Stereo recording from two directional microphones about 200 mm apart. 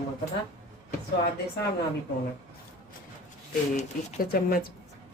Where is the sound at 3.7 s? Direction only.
40° left (ahead or behind).